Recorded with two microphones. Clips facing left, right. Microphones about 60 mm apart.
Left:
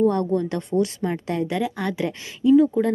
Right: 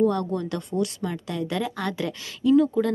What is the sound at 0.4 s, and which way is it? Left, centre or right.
A woman's voice, left.